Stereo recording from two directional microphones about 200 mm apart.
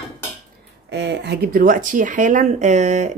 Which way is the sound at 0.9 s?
60° right (ahead or behind).